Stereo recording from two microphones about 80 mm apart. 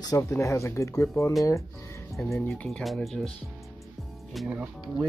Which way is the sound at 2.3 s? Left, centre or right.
Centre.